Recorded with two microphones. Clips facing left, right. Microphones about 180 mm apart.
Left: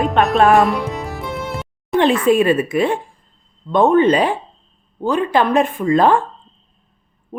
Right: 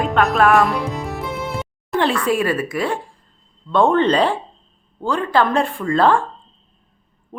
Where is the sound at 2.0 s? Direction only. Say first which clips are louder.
Left 5 dB; 20° left (ahead or behind).